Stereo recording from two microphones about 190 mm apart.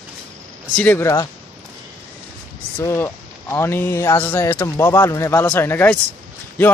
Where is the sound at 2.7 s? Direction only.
15° left (ahead or behind).